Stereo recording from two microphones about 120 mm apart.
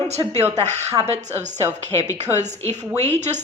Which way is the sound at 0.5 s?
70° right (ahead or behind).